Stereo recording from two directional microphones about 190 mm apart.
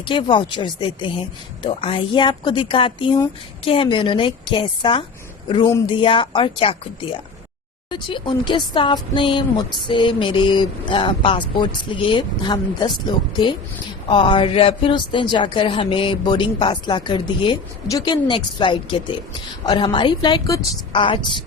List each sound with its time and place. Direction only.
0.0 s speech: 25° left (ahead or behind)